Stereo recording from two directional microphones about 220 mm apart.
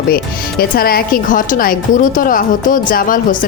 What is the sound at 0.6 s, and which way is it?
Speech, 45° left (ahead or behind).